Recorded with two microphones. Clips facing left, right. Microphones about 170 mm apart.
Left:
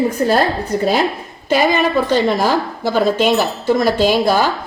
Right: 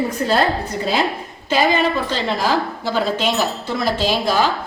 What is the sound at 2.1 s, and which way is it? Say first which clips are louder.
Speech: left 5 dB; 50° left (ahead or behind).